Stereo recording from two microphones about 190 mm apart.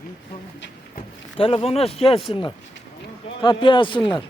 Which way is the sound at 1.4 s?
30° left (ahead or behind).